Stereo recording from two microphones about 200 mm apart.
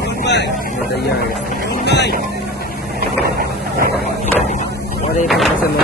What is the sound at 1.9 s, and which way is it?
Speech, 55° left (ahead or behind).